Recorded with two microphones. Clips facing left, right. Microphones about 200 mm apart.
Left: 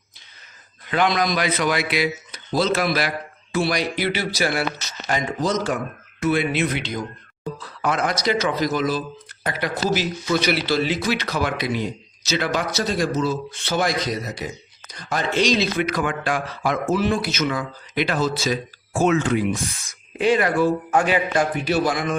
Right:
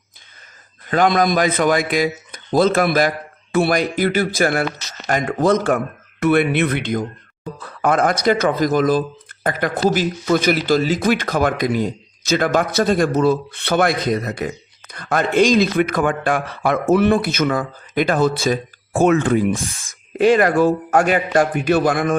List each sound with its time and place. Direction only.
0.9 s speech: 45° right (ahead or behind)